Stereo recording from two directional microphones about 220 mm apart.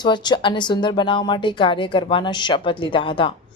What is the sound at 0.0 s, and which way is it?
Speech, 20° left (ahead or behind).